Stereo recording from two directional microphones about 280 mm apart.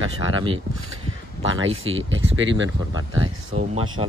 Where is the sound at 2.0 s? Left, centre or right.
Right.